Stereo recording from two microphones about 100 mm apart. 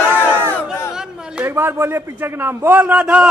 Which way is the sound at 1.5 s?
25° right (ahead or behind).